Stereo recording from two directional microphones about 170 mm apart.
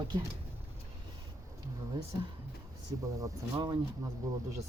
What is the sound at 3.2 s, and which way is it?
Speech, 20° right (ahead or behind).